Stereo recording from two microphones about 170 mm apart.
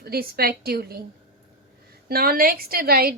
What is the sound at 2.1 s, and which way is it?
A woman's voice, 60° right (ahead or behind).